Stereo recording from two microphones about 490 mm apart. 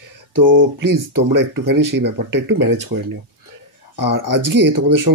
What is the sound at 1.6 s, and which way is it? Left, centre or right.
Speech, right.